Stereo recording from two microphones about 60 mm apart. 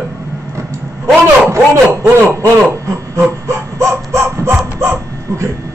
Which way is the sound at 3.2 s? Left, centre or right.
Right.